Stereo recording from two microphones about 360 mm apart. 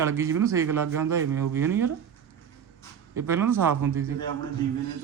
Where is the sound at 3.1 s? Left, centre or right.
Centre.